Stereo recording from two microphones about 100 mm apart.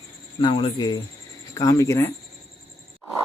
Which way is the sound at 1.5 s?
35° left (ahead or behind).